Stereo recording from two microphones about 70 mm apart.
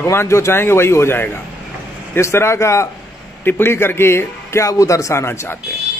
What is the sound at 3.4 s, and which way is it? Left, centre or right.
A man's voice, left.